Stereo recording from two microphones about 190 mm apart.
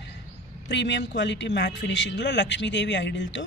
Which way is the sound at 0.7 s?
65° left (ahead or behind).